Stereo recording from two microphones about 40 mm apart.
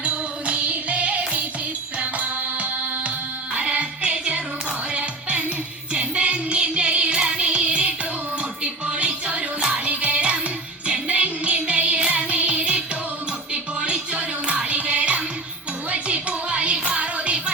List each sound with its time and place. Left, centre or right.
0.0 s music: right